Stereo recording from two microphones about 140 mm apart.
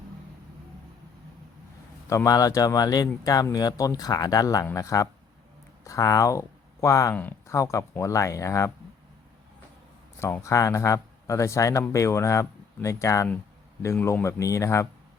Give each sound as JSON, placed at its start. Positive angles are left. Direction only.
{"t": 2.0, "sound": "speech", "side_deg": 25}
{"t": 7.1, "sound": "speech", "side_deg": 15}
{"t": 10.2, "sound": "speech", "side_deg": 20}